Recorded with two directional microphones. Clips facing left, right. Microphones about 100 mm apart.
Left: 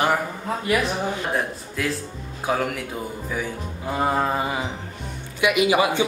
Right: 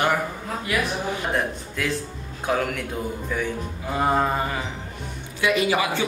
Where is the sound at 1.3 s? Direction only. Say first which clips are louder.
Even; centre (ahead or behind).